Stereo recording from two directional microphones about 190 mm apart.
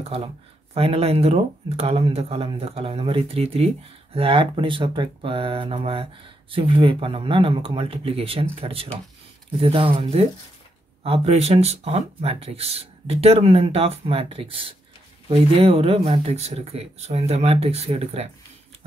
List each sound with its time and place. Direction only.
0.7 s speech: 30° right (ahead or behind)